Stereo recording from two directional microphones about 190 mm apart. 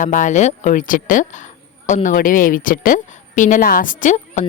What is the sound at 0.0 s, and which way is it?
A woman's voice, 40° left (ahead or behind).